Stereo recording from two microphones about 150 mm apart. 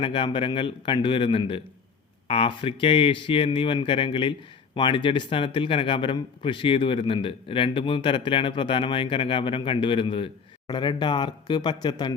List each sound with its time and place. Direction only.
0.0 s speech: 35° left (ahead or behind)